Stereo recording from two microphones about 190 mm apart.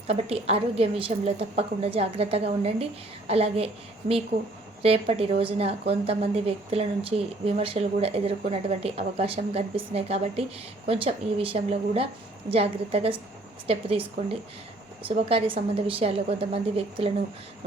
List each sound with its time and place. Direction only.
0.1 s a woman's voice: 30° right (ahead or behind)
4.8 s a woman's voice: 30° right (ahead or behind)